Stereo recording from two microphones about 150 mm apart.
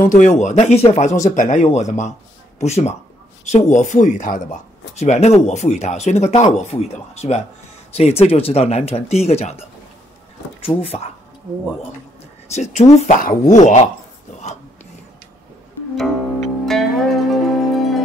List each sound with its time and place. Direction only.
0.0 s speech: 60° left (ahead or behind); by 11.0 s 40° left (ahead or behind)
12.5 s speech: 50° left (ahead or behind)
16.4 s music: centre (ahead or behind)